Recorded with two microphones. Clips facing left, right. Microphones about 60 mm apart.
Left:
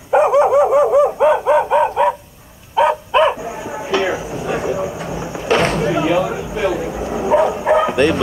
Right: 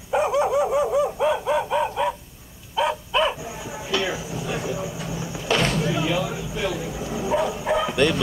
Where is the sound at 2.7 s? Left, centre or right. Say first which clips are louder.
Left 8 dB; left.